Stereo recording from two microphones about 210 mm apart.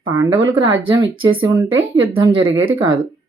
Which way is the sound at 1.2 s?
25° right (ahead or behind).